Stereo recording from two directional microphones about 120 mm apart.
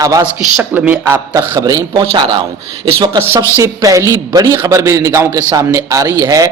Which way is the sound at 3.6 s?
30° right (ahead or behind).